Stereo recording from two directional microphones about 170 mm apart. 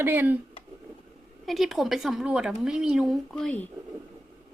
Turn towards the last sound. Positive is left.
turn(degrees=5)  # may be behind; listen again after turning